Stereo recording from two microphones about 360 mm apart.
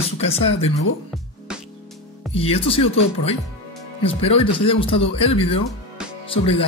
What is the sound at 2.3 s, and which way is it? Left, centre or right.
Speech, centre.